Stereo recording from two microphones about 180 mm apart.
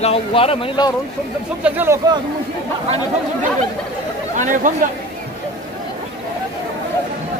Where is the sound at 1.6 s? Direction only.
10° right (ahead or behind).